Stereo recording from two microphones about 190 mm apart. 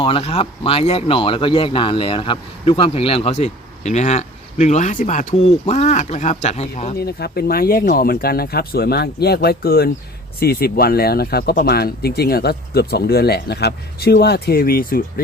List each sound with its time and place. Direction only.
0.0 s speech: 30° left (ahead or behind)
6.9 s speech: 55° left (ahead or behind)